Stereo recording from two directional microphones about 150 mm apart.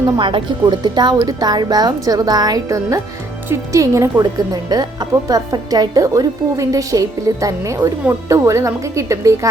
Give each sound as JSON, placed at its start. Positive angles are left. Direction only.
{"t": 0.0, "sound": "speech", "side_deg": -30}